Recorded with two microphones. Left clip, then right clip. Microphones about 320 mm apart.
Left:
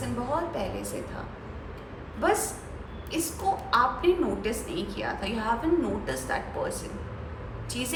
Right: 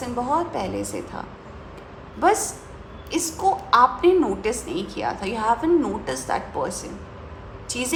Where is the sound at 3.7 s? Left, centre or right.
Centre.